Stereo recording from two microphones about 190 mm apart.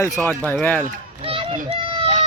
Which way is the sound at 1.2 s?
30° right (ahead or behind).